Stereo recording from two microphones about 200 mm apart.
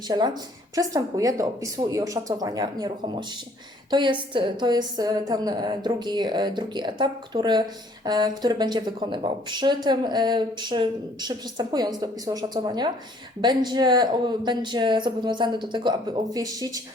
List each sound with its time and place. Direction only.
0.1 s a woman's voice: 20° right (ahead or behind)